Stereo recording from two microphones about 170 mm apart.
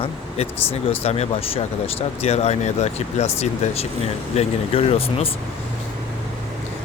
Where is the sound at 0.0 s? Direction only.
35° left (ahead or behind).